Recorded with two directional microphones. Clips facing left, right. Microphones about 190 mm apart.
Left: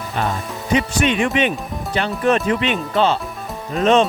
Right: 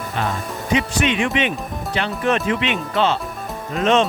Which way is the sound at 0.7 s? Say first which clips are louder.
Left 2 dB; 45° left (ahead or behind).